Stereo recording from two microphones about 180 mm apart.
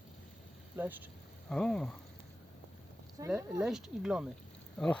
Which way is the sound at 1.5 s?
5° left (ahead or behind).